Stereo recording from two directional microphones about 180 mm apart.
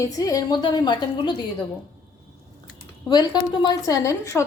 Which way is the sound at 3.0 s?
20° left (ahead or behind).